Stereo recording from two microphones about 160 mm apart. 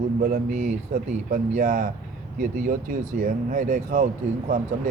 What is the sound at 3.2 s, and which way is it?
Speech, 55° right (ahead or behind).